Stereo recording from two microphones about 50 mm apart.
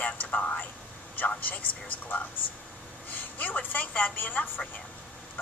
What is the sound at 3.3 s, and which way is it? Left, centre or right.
A woman's voice, left.